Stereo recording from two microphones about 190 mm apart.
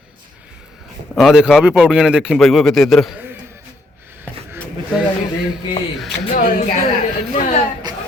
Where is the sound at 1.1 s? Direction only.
Centre (ahead or behind).